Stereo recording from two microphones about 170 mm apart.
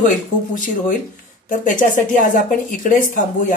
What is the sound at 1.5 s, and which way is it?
Speech, 50° left (ahead or behind).